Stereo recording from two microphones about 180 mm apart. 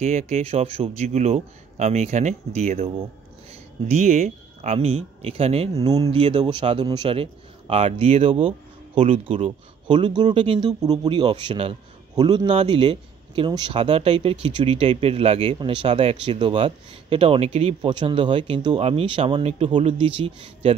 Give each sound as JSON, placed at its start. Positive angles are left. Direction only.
{"t": 0.0, "sound": "a man's voice", "side_deg": -40}
{"t": 5.8, "sound": "speech", "side_deg": -20}
{"t": 6.0, "sound": "a man's voice", "side_deg": -30}